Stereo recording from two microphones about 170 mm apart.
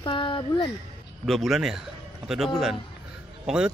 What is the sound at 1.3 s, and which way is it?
Speech, centre (ahead or behind).